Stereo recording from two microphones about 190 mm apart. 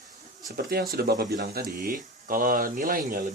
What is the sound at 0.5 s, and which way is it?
Speech, 55° right (ahead or behind).